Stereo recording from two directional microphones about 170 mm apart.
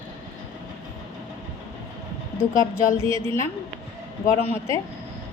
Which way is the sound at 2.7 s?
15° left (ahead or behind).